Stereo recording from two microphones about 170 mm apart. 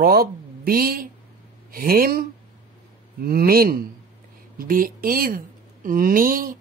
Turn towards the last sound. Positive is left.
turn(degrees=-55)  # may be behind; listen again after turning